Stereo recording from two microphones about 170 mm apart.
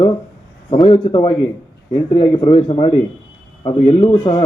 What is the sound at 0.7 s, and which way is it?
A man's voice, 30° left (ahead or behind).